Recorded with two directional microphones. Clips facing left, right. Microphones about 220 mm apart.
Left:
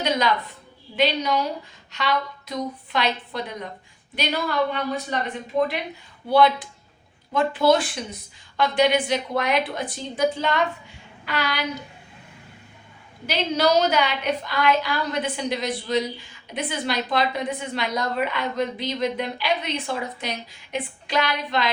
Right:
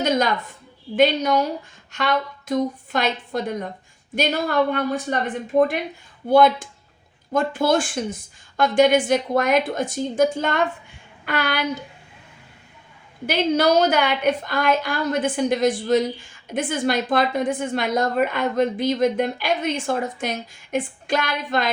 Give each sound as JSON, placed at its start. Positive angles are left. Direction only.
{"t": 0.9, "sound": "a woman's voice", "side_deg": -50}
{"t": 13.2, "sound": "a woman's voice", "side_deg": -50}